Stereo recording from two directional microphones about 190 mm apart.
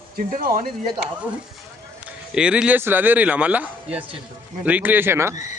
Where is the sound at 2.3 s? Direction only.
5° right (ahead or behind).